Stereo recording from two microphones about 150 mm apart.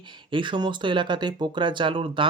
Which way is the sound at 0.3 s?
35° right (ahead or behind).